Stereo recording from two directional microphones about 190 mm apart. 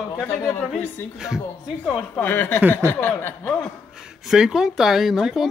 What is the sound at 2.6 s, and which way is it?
Speech, 10° right (ahead or behind).